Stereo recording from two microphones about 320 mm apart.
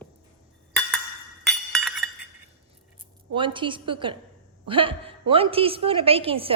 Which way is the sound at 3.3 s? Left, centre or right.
Centre.